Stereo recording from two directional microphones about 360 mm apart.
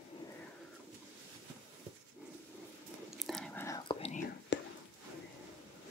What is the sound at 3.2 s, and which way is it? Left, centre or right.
Whispering, centre.